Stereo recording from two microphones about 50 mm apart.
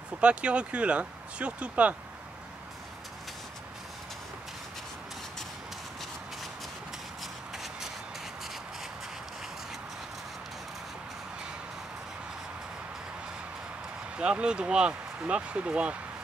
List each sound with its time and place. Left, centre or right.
0.2 s speech: right
7.5 s a sound: centre
14.1 s speech: right